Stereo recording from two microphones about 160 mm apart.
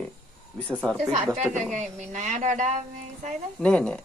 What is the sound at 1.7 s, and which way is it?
Speech, 50° right (ahead or behind).